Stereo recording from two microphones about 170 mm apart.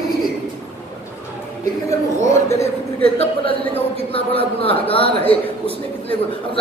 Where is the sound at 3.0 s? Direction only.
35° left (ahead or behind).